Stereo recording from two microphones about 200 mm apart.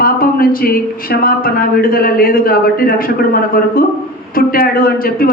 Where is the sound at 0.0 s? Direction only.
45° left (ahead or behind).